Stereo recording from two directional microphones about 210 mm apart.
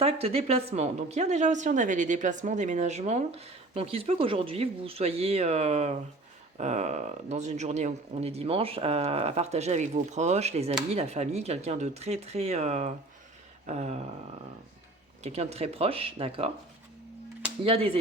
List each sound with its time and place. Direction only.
0.0 s a woman's voice: 30° right (ahead or behind)
15.2 s speech: 30° right (ahead or behind)
17.6 s speech: 25° right (ahead or behind)